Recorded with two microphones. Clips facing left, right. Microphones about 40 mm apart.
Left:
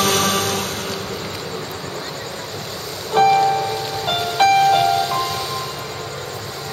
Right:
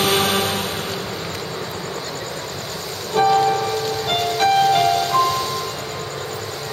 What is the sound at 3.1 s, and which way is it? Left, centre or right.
Music, left.